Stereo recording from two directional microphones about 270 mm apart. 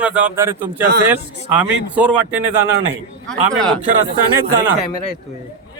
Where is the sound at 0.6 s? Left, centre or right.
Right.